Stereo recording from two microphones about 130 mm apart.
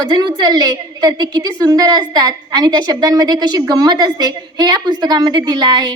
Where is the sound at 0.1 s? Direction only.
30° right (ahead or behind).